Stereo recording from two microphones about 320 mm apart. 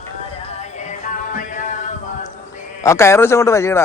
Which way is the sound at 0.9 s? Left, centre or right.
Left.